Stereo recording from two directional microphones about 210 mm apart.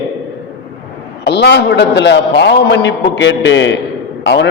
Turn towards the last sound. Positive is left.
turn(degrees=55)  # may be behind; listen again after turning